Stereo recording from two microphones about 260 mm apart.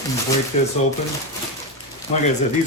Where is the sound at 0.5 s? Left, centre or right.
Left.